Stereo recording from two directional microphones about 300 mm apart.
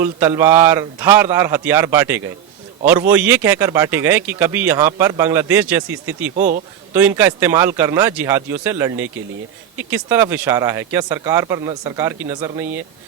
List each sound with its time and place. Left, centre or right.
0.0 s speech: centre
6.3 s a man's voice: right
6.9 s speech: centre